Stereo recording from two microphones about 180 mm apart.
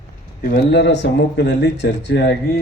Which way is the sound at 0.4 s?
70° left (ahead or behind).